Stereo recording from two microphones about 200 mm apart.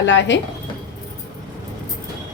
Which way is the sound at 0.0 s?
60° left (ahead or behind).